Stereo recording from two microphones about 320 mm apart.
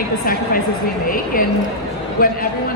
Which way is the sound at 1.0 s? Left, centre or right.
Left.